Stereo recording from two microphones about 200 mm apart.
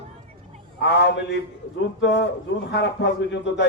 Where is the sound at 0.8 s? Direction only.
60° left (ahead or behind).